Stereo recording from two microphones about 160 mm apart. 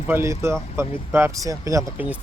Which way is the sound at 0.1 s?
15° right (ahead or behind).